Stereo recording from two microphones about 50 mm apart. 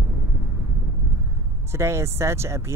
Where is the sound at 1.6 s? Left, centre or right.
Right.